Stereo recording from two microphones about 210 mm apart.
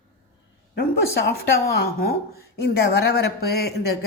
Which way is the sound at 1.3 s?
45° left (ahead or behind).